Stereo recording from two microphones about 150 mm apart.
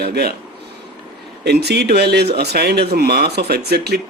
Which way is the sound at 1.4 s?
90° right.